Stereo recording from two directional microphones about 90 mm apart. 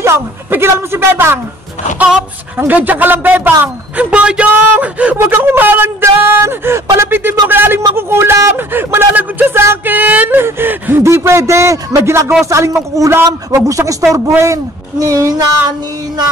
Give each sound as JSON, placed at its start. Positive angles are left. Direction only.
{"t": 0.0, "sound": "a man's voice", "side_deg": -30}
{"t": 2.0, "sound": "a man's voice", "side_deg": -5}
{"t": 2.6, "sound": "a man's voice", "side_deg": -20}